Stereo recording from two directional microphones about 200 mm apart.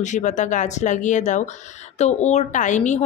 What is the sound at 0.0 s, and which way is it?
Speech, 35° left (ahead or behind).